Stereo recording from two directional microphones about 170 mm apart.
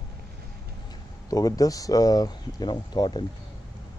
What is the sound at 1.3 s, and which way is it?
Speech, 20° left (ahead or behind).